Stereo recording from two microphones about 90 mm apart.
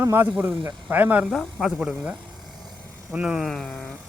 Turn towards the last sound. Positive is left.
turn(degrees=0)  # may be behind; listen again after turning